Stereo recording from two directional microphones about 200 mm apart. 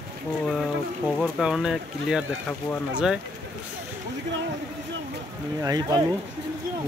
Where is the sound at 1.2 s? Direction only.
5° right (ahead or behind).